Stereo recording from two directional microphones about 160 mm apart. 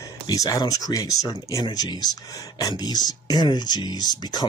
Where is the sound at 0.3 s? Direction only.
20° left (ahead or behind).